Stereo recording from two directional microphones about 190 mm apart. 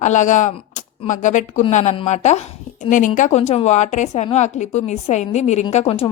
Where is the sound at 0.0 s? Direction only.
40° left (ahead or behind).